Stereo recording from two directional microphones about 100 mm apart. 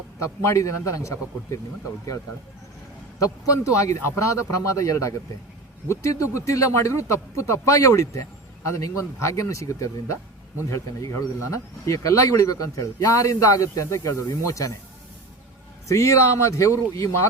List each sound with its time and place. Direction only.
0.2 s speech: 30° left (ahead or behind)
3.2 s speech: 35° left (ahead or behind)
15.9 s speech: 30° left (ahead or behind)